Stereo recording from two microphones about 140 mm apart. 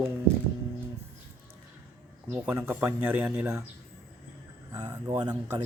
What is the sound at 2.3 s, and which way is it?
Speech, 15° right (ahead or behind).